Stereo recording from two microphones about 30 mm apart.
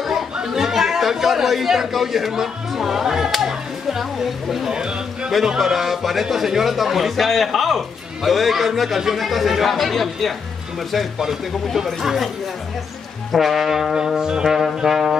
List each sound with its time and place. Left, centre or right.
0.4 s speech: centre
4.7 s a man's voice: right
5.6 s speech: centre
11.7 s speech: centre
13.3 s speech: centre
13.9 s speech: right